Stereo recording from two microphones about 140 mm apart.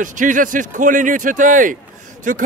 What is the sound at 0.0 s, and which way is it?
A man's voice, 65° right (ahead or behind).